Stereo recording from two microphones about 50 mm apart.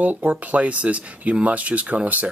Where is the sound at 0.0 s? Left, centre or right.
Right.